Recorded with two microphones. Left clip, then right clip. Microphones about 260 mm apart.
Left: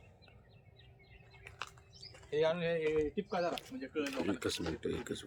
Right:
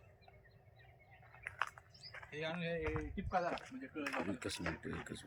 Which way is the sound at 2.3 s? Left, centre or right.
Centre.